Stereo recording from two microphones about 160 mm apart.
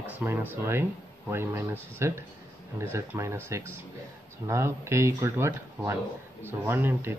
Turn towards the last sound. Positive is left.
turn(degrees=-15)  # may be behind; listen again after turning